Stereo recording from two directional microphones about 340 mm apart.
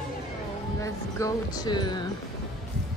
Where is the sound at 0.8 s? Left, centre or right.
Centre.